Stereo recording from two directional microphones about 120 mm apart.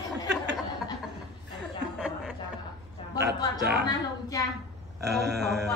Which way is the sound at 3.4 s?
30° left (ahead or behind).